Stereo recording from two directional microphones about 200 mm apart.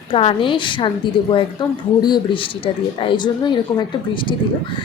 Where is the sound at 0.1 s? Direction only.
25° left (ahead or behind).